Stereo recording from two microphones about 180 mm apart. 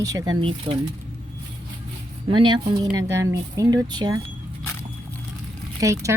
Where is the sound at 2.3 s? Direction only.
25° right (ahead or behind).